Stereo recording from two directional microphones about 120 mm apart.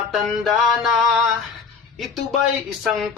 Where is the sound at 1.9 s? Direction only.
Centre (ahead or behind).